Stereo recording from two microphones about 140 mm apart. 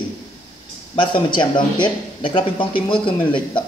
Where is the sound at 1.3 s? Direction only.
35° left (ahead or behind).